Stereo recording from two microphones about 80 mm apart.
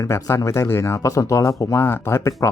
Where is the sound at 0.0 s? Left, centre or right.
Left.